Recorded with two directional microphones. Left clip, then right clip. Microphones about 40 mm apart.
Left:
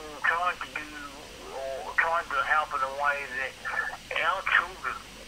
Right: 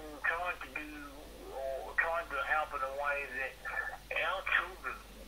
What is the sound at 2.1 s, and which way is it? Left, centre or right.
Radio, left.